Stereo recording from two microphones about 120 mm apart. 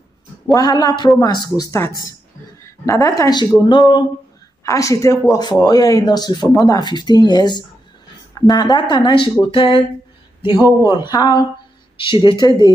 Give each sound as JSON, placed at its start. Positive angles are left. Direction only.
{"t": 0.6, "sound": "a woman's voice", "side_deg": 35}
{"t": 4.6, "sound": "speech", "side_deg": 25}